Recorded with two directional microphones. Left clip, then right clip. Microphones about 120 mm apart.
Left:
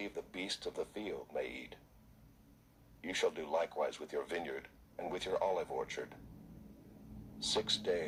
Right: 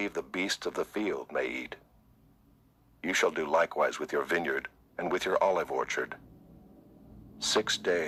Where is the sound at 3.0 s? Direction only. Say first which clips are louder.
Right 8 dB; 45° right (ahead or behind).